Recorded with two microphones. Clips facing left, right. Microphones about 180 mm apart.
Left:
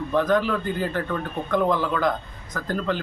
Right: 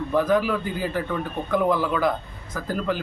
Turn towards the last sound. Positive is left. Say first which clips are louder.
# even
turn(degrees=-10)  # may be behind; listen again after turning